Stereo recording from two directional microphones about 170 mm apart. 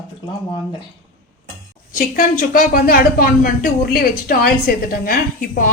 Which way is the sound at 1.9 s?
55° left (ahead or behind).